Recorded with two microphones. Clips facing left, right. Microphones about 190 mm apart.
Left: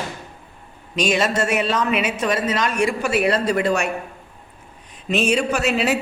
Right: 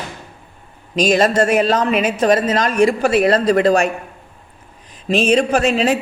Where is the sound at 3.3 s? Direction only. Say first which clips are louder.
Right 6 dB; 90° right.